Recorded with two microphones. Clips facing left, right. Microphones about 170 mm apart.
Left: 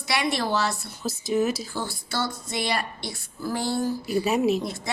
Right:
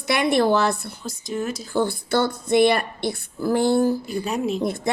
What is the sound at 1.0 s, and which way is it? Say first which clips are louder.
Speech: left 4 dB; 5° left (ahead or behind).